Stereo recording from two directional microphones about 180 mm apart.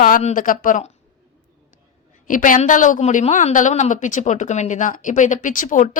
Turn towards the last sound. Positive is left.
turn(degrees=45)  # may be behind; listen again after turning